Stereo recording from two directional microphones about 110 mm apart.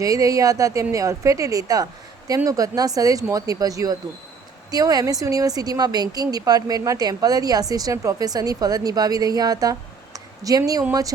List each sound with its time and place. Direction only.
0.0 s a woman's voice: 30° right (ahead or behind)